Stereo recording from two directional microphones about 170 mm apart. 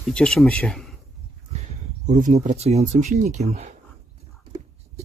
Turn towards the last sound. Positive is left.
turn(degrees=-40)  # may be behind; listen again after turning